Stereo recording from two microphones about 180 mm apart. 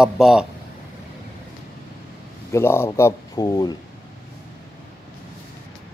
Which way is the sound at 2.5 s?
15° left (ahead or behind).